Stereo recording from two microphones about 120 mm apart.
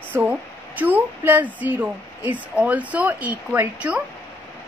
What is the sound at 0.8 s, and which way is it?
A woman's voice, 15° right (ahead or behind).